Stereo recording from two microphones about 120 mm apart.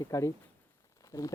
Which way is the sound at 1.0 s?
30° left (ahead or behind).